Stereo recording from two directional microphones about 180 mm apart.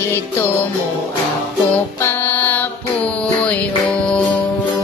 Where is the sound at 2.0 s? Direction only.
15° left (ahead or behind).